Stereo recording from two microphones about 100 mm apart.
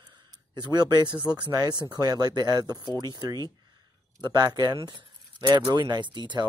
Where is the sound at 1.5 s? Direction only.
40° right (ahead or behind).